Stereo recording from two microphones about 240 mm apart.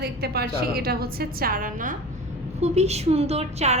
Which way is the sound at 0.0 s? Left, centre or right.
Right.